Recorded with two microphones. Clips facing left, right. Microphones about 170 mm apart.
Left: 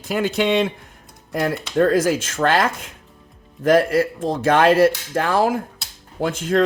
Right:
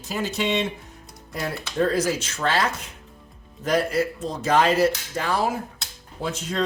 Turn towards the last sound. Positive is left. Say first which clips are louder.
# left 8 dB
turn(degrees=55)  # may be behind; listen again after turning